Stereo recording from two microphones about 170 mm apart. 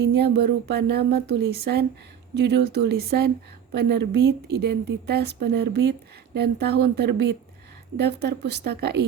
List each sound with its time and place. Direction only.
0.0 s speech: 75° right (ahead or behind)